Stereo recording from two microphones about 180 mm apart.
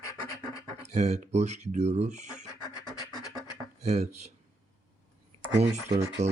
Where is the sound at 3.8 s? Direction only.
35° right (ahead or behind).